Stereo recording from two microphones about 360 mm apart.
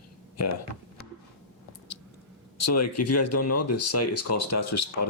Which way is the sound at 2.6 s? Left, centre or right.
Left.